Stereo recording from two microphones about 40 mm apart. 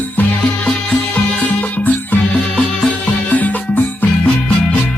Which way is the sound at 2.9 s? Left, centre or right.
Left.